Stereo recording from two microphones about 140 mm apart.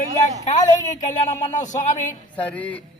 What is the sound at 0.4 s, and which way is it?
A woman's voice, 60° left (ahead or behind).